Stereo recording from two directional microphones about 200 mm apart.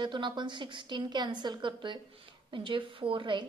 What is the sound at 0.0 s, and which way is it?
A woman's voice, 25° right (ahead or behind).